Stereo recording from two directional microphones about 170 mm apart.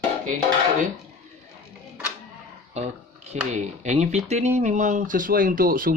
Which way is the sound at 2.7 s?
40° right (ahead or behind).